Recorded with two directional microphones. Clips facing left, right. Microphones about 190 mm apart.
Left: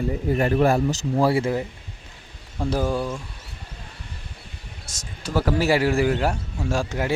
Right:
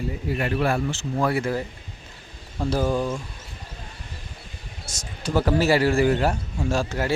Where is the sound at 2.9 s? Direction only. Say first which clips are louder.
Right 1 dB; 5° left (ahead or behind).